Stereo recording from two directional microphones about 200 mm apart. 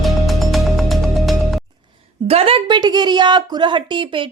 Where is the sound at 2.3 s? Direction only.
30° right (ahead or behind).